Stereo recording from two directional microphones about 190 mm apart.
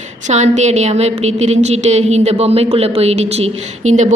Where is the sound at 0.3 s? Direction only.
40° right (ahead or behind).